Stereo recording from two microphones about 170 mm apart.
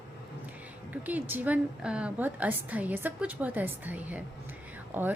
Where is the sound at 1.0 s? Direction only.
10° right (ahead or behind).